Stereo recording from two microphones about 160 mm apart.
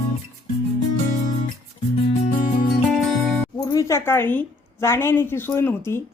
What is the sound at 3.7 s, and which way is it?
A woman's voice, 20° left (ahead or behind).